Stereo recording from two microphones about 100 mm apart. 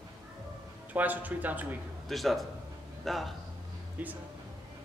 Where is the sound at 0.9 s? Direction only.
15° right (ahead or behind).